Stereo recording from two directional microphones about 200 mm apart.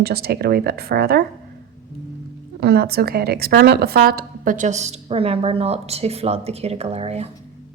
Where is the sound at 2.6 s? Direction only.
50° right (ahead or behind).